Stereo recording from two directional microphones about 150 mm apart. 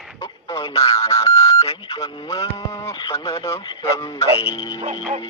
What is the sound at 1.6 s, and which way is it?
Dog, 40° left (ahead or behind).